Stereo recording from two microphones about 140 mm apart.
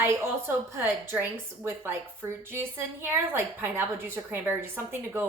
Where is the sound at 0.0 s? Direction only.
15° right (ahead or behind).